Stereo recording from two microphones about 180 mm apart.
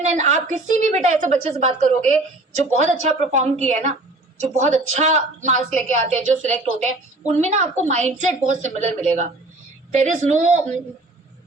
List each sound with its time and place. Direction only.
0.0 s a woman's voice: 40° right (ahead or behind)